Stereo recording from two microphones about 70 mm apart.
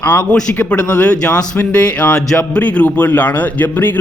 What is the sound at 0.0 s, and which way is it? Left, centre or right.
A man's voice, left.